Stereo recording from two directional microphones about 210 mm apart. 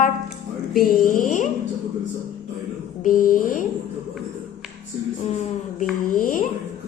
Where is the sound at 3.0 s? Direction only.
40° left (ahead or behind).